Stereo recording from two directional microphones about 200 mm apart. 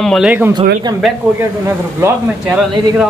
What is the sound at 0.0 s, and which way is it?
Speech, centre (ahead or behind).